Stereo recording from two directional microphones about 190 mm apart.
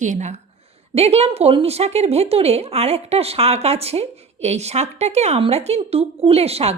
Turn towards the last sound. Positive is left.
turn(degrees=-35)  # may be behind; listen again after turning